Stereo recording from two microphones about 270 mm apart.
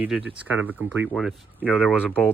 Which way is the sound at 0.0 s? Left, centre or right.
Centre.